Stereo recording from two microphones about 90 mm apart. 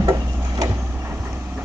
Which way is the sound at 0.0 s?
45° right (ahead or behind).